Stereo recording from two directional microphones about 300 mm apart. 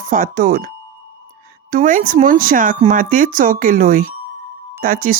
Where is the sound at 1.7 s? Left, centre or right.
Right.